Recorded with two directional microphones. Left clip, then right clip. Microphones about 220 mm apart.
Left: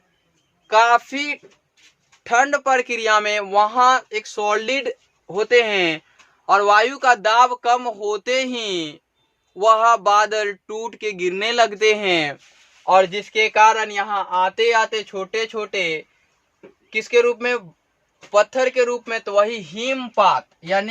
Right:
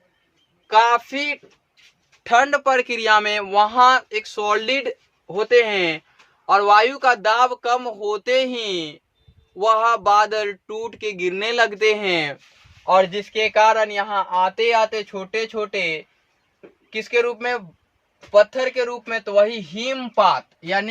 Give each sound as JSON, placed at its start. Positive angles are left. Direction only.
{"t": 0.7, "sound": "speech", "side_deg": 15}
{"t": 2.2, "sound": "a man's voice", "side_deg": -10}
{"t": 14.3, "sound": "speech", "side_deg": 15}
{"t": 16.6, "sound": "speech", "side_deg": 30}